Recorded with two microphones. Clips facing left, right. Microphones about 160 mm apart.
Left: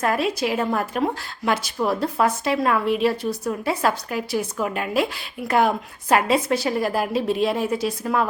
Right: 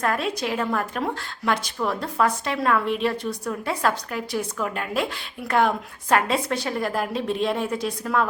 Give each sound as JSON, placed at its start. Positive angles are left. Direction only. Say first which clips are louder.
{"t": 0.0, "sound": "a woman's voice", "louder": "left 3 dB", "side_deg": 5}